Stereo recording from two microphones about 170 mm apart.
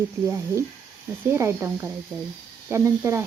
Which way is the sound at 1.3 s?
15° right (ahead or behind).